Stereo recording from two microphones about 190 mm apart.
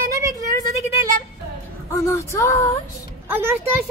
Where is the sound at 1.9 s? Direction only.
15° left (ahead or behind).